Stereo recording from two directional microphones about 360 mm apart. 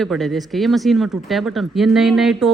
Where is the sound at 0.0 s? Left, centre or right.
Centre.